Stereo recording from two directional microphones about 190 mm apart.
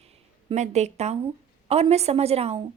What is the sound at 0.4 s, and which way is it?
Speech, 35° right (ahead or behind).